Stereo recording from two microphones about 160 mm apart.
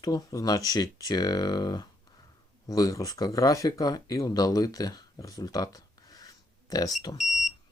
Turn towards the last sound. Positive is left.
turn(degrees=0)  # may be behind; listen again after turning